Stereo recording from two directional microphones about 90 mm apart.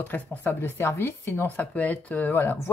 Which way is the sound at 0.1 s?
20° left (ahead or behind).